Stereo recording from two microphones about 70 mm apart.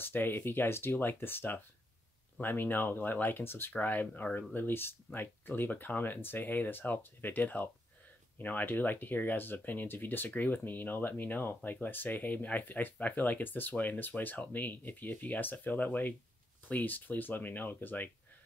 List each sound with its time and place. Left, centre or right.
0.0 s speech: left